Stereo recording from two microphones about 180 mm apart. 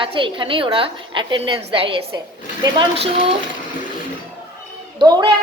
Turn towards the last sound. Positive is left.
turn(degrees=-25)  # may be behind; listen again after turning